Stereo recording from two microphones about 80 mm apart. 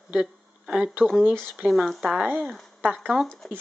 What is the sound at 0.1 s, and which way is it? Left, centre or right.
Speech, centre.